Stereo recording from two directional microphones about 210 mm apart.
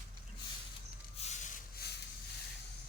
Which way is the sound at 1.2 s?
35° left (ahead or behind).